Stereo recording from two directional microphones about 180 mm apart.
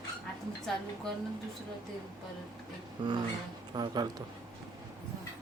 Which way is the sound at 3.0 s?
25° right (ahead or behind).